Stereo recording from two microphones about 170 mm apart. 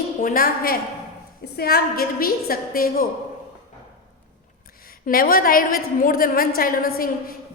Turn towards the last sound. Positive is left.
turn(degrees=55)  # may be behind; listen again after turning